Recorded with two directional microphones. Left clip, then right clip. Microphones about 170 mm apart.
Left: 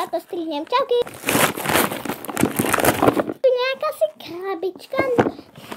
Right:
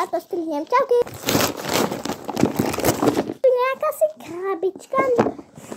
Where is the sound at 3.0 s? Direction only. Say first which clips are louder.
Left 2 dB; 40° left (ahead or behind).